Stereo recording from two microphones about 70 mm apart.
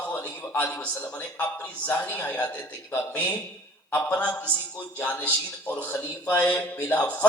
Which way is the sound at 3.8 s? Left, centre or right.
Left.